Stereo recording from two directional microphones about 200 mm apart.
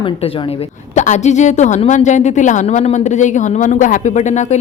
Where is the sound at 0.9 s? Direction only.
35° left (ahead or behind).